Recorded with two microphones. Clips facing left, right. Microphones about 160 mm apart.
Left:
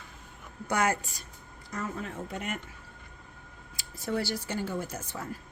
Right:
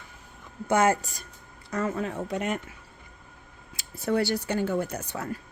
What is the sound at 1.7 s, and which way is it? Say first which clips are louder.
Speech: right 7 dB; 75° right (ahead or behind).